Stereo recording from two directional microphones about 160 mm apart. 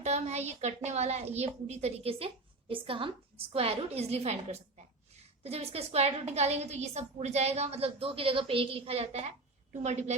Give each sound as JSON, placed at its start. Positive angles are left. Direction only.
{"t": 0.0, "sound": "a woman's voice", "side_deg": -45}